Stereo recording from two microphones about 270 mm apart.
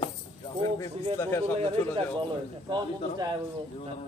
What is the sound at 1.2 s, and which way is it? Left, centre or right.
Speech, centre.